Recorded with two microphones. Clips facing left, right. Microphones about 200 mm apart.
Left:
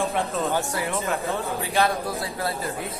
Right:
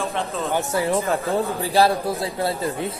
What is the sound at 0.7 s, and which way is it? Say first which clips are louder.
Speech: right 5 dB; 30° right (ahead or behind).